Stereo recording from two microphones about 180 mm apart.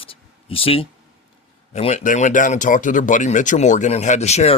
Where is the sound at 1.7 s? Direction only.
40° left (ahead or behind).